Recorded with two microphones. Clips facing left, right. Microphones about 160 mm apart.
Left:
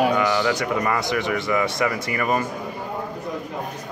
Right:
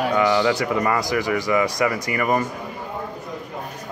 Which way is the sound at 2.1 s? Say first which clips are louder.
Right 2 dB; 20° right (ahead or behind).